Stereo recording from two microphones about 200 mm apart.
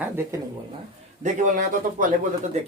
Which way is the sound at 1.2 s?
40° right (ahead or behind).